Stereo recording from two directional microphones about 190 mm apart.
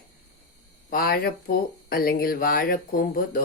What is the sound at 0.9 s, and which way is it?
Speech, 50° left (ahead or behind).